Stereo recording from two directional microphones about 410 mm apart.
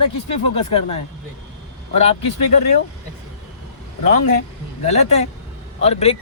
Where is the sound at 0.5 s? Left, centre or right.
Centre.